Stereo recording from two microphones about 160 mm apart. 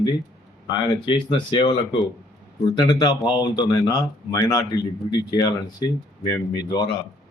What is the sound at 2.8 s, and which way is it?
Speech, 25° left (ahead or behind).